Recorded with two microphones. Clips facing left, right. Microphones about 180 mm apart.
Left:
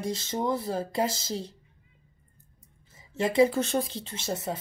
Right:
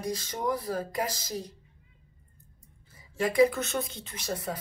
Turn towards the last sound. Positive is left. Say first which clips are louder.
# left 2 dB
turn(degrees=25)  # may be behind; listen again after turning